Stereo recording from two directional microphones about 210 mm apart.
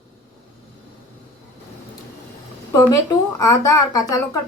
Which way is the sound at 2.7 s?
15° left (ahead or behind).